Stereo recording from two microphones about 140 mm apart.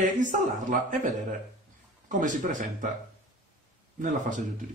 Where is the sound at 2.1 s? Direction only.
65° right (ahead or behind).